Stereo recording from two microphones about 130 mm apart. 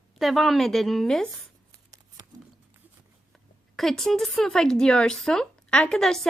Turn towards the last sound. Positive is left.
turn(degrees=5)  # may be behind; listen again after turning